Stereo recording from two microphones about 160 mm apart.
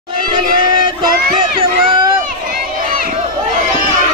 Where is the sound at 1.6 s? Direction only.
30° right (ahead or behind).